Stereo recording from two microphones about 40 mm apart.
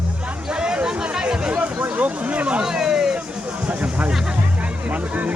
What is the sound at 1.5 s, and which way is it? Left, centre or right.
Speech, right.